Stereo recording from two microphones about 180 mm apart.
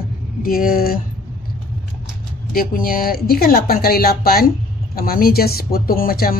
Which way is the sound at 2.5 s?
50° left (ahead or behind).